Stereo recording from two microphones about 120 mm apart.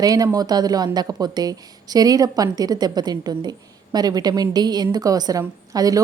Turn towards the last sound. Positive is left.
turn(degrees=-30)  # may be behind; listen again after turning